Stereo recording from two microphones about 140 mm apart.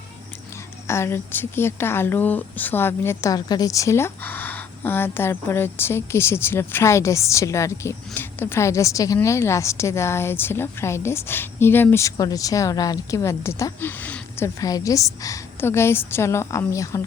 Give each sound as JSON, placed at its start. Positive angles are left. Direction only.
{"t": 0.9, "sound": "a woman's voice", "side_deg": 20}